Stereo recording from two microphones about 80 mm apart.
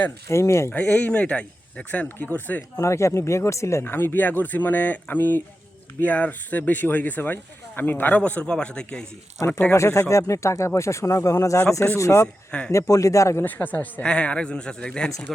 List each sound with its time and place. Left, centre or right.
0.3 s speech: left
0.7 s speech: centre
2.7 s a man's voice: left; by 9.0 s centre
9.5 s speech: left
9.7 s speech: left
12.5 s speech: centre
12.7 s speech: left
13.4 s a man's voice: left